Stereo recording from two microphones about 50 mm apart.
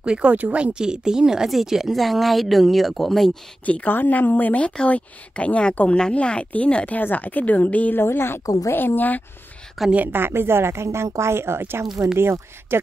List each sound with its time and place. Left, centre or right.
0.0 s speech: centre
0.7 s a woman's voice: centre
3.6 s speech: left
7.0 s speech: left
7.9 s a woman's voice: left
9.8 s a woman's voice: centre
10.1 s a woman's voice: right